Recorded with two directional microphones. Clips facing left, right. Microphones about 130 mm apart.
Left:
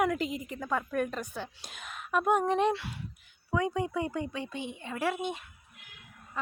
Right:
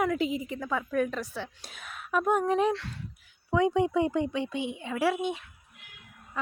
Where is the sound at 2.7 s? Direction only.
10° left (ahead or behind).